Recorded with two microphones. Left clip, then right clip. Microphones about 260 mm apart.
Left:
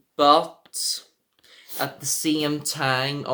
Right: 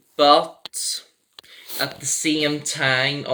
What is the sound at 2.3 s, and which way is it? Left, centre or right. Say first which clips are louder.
Speech: right 3 dB; left.